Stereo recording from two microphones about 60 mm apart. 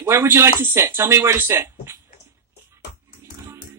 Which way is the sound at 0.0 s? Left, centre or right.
Right.